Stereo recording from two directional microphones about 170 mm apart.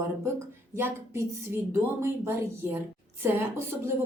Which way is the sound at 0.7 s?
15° right (ahead or behind).